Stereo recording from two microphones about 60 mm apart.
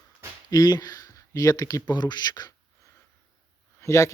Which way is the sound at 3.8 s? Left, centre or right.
Left.